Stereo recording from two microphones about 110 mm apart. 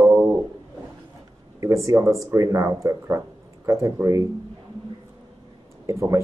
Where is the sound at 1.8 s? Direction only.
30° right (ahead or behind).